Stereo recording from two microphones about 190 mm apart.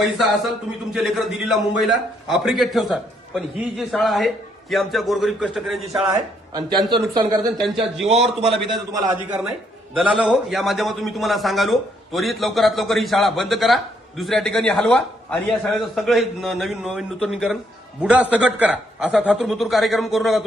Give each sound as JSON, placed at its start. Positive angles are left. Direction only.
{"t": 0.9, "sound": "a man's voice", "side_deg": 0}
{"t": 6.1, "sound": "speech", "side_deg": -20}
{"t": 8.0, "sound": "a man's voice", "side_deg": -30}
{"t": 8.9, "sound": "a man's voice", "side_deg": -20}
{"t": 9.3, "sound": "a man's voice", "side_deg": -5}